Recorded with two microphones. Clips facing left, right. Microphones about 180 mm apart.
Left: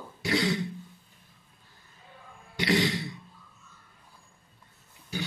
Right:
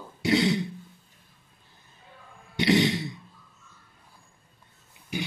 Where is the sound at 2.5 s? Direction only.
20° right (ahead or behind).